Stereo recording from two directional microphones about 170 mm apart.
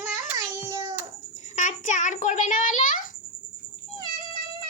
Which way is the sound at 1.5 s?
45° left (ahead or behind).